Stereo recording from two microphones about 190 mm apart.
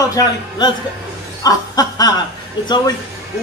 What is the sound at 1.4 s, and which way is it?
Snicker, 20° left (ahead or behind).